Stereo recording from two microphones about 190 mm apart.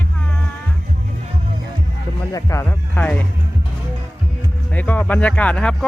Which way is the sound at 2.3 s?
15° left (ahead or behind).